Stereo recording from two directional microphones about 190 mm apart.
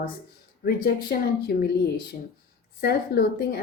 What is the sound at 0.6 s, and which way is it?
Speech, 55° left (ahead or behind).